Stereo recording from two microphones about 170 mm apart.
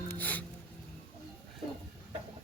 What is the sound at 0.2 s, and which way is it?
Music, 10° left (ahead or behind).